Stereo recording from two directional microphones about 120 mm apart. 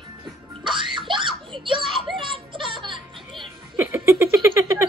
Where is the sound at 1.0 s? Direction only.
45° right (ahead or behind).